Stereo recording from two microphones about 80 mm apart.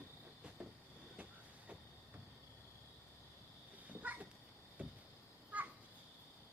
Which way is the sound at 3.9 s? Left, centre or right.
Centre.